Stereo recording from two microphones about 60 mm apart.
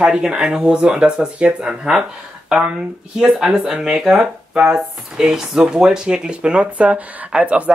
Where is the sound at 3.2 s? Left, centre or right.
Centre.